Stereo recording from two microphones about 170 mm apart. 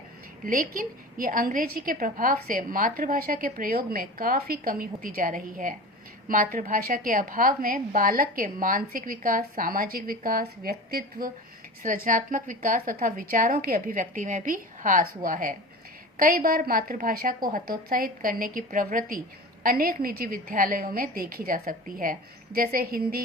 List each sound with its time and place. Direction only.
0.4 s a woman's voice: 55° right (ahead or behind)
12.0 s a woman's voice: 50° right (ahead or behind)